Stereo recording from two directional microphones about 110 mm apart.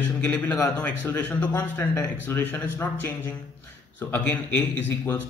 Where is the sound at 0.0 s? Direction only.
15° left (ahead or behind).